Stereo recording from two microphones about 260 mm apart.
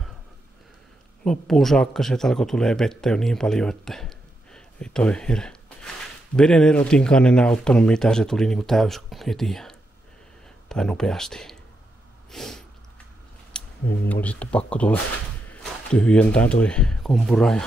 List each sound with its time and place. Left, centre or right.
1.2 s speech: centre
12.3 s sneeze: centre
13.5 s a sound: centre
14.0 s speech: centre